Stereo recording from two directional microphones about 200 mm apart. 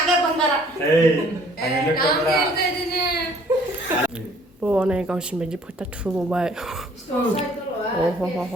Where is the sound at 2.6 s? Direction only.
55° left (ahead or behind).